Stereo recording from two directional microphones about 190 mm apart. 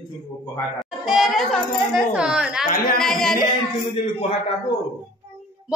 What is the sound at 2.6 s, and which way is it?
Speech, 50° left (ahead or behind).